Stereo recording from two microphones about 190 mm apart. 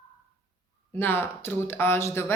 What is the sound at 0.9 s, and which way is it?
Speech, 10° left (ahead or behind).